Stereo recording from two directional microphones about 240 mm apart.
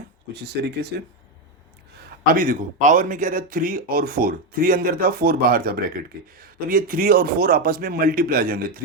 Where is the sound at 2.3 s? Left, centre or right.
Right.